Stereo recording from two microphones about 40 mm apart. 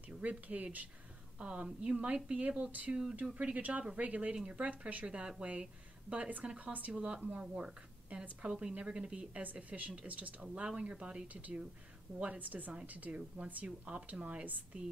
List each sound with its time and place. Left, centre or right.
0.0 s speech: right
2.9 s speech: centre
3.3 s speech: right
6.1 s speech: right
6.9 s a woman's voice: right
9.4 s speech: right
10.4 s speech: right
11.2 s speech: right